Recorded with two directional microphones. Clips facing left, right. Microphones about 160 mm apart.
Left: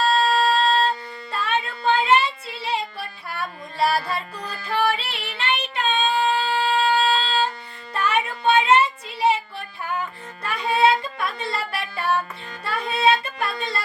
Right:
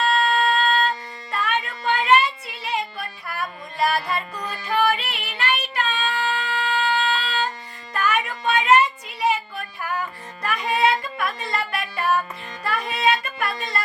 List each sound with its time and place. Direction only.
0.0 s music: 30° left (ahead or behind)
5.4 s child singing: 25° left (ahead or behind)
7.9 s music: 25° left (ahead or behind)
10.4 s music: 30° left (ahead or behind)
10.8 s a sound: 25° left (ahead or behind)
11.5 s child singing: 30° left (ahead or behind)
12.6 s music: 30° left (ahead or behind)